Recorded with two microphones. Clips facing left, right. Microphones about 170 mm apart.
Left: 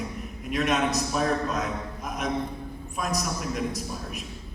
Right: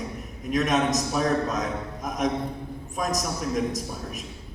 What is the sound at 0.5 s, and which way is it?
Speech, 45° right (ahead or behind).